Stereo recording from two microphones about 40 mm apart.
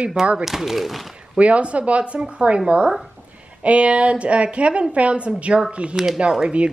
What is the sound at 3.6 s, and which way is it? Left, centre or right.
A woman's voice, right.